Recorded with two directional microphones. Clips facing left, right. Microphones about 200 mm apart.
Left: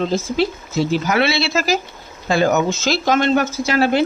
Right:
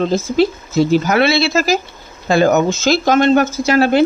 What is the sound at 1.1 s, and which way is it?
Speech, 45° right (ahead or behind).